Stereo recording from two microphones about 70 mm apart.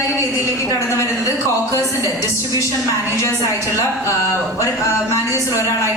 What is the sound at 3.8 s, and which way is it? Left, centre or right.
A man's voice, left.